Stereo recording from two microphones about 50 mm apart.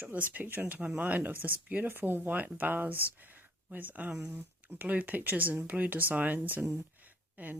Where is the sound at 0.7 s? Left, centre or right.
Right.